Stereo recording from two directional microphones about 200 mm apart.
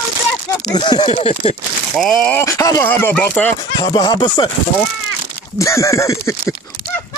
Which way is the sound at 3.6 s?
20° left (ahead or behind).